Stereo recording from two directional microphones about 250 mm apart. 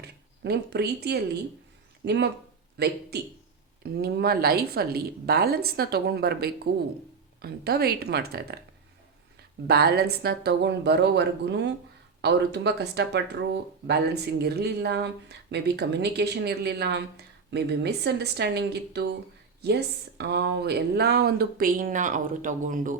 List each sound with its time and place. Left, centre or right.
0.0 s speech: right
9.6 s speech: right